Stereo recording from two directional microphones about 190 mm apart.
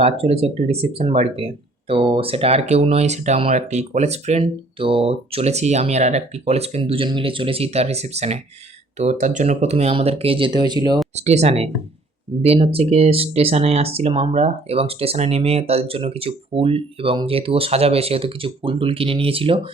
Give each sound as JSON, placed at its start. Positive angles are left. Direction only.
{"t": 0.0, "sound": "speech", "side_deg": -30}
{"t": 11.1, "sound": "speech", "side_deg": -35}